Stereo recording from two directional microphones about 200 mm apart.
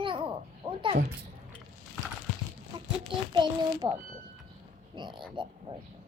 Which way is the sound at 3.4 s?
25° right (ahead or behind).